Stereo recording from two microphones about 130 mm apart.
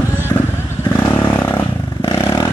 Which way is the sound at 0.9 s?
15° left (ahead or behind).